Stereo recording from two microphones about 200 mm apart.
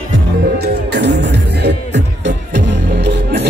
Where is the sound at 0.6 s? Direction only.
55° right (ahead or behind).